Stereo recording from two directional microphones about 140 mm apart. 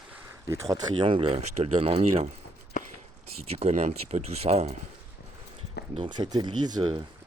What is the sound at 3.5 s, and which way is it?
Speech, 50° right (ahead or behind).